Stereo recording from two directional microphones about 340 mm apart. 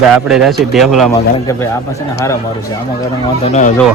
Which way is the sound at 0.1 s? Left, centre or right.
Centre.